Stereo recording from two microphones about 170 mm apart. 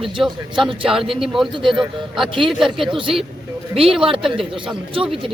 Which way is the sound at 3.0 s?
30° right (ahead or behind).